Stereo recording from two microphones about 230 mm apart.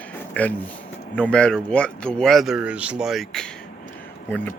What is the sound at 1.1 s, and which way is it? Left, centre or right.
Speech, centre.